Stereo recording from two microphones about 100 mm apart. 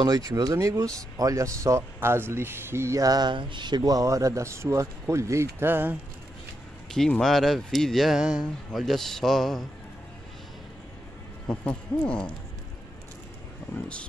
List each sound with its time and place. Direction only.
0.0 s speech: 40° right (ahead or behind); by 5.9 s 20° right (ahead or behind)
6.9 s speech: 5° left (ahead or behind)
11.4 s speech: 10° left (ahead or behind)